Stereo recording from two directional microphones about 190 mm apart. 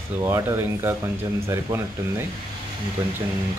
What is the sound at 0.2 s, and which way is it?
Speech, 15° right (ahead or behind).